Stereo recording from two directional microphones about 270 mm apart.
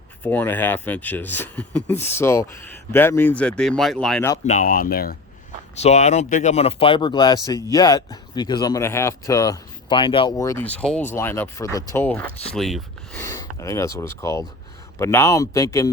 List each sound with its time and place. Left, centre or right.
0.2 s speech: centre
4.4 s speech: left; by 12.8 s centre
13.1 s speech: centre